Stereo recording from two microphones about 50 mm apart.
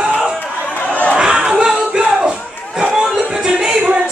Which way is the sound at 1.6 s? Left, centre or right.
Centre.